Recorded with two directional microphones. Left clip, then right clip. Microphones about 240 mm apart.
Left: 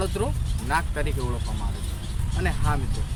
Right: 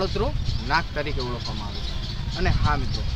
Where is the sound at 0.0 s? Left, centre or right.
Centre.